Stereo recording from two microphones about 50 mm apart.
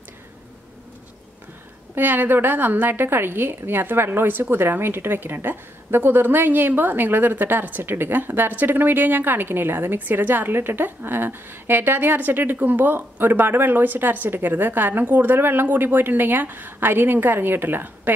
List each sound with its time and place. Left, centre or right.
2.0 s a woman's voice: right